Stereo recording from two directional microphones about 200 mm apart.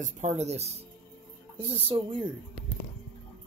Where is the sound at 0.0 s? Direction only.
35° right (ahead or behind).